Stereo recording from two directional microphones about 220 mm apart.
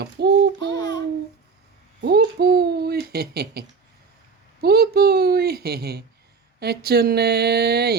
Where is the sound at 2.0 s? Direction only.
45° right (ahead or behind).